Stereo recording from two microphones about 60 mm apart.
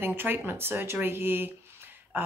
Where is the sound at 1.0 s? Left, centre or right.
Right.